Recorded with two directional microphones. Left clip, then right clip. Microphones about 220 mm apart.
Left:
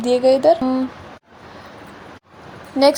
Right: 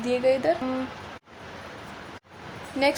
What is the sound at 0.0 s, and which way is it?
Speech, 25° left (ahead or behind).